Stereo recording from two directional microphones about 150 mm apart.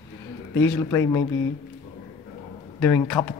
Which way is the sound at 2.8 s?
10° left (ahead or behind).